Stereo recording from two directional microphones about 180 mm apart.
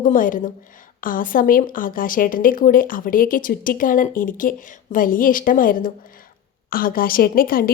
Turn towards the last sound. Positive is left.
turn(degrees=55)  # may be behind; listen again after turning